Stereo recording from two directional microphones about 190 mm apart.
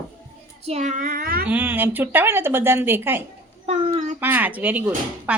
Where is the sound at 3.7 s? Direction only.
35° right (ahead or behind).